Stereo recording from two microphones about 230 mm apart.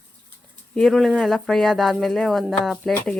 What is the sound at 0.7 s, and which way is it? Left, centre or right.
Speech, centre.